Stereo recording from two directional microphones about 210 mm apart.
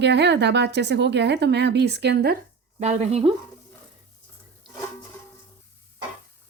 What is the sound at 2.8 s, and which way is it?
Speech, 30° right (ahead or behind).